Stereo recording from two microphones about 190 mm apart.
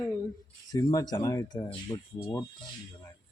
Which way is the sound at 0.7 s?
20° left (ahead or behind).